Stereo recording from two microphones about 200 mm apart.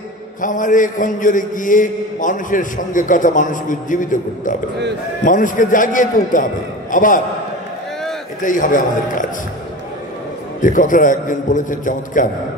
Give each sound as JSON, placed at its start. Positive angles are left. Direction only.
{"t": 0.4, "sound": "a man's voice", "side_deg": 40}
{"t": 8.4, "sound": "a man's voice", "side_deg": 40}
{"t": 10.6, "sound": "a man's voice", "side_deg": 40}